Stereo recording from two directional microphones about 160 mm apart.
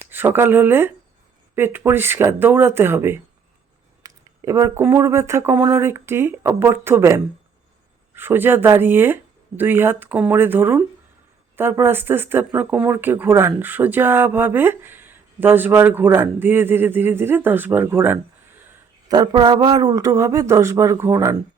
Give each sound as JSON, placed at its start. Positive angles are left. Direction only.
{"t": 0.0, "sound": "speech", "side_deg": -10}
{"t": 19.0, "sound": "a man's voice", "side_deg": -25}